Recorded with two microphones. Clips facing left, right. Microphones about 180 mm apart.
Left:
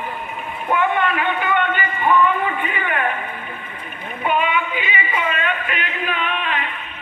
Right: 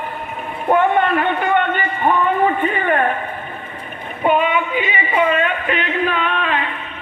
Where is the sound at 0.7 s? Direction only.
40° right (ahead or behind).